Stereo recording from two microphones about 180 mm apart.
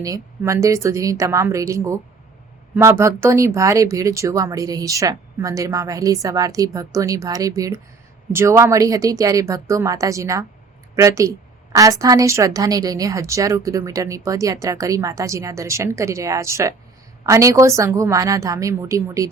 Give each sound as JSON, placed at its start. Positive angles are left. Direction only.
{"t": 0.0, "sound": "a woman's voice", "side_deg": -15}